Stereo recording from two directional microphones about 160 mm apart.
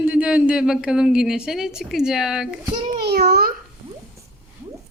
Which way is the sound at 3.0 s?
80° right.